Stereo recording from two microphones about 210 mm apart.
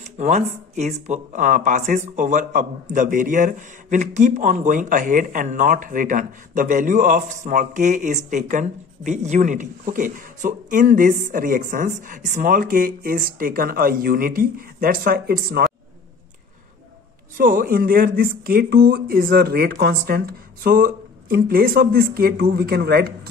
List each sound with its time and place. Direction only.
0.2 s a man's voice: 35° right (ahead or behind)
17.4 s speech: 40° right (ahead or behind)